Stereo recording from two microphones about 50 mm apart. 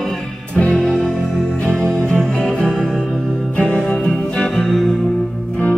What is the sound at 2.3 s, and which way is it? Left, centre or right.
Music, centre.